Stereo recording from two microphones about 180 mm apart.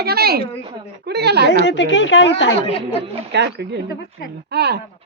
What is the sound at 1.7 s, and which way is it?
Speech, 85° left.